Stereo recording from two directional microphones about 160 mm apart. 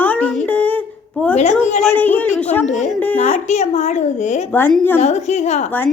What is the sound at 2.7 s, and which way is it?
A woman's voice, 45° left (ahead or behind).